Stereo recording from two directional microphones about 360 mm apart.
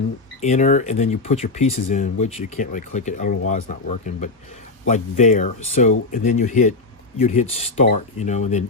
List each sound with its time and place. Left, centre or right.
0.4 s speech: centre